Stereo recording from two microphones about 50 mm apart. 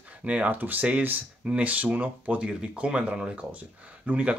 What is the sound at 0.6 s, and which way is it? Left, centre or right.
Speech, right.